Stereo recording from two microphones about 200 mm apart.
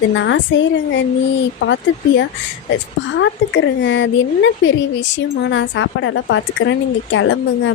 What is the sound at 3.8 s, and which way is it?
A woman's voice, 65° left (ahead or behind).